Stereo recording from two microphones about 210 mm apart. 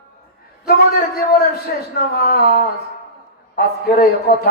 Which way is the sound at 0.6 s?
45° left (ahead or behind).